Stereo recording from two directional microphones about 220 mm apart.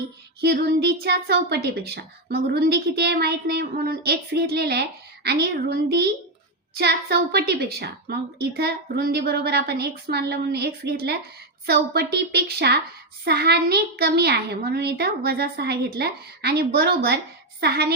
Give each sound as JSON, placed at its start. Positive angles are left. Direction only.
{"t": 0.4, "sound": "a child's voice", "side_deg": -45}